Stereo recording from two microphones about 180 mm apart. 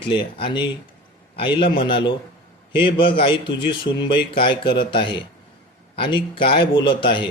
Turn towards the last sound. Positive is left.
turn(degrees=25)  # may be behind; listen again after turning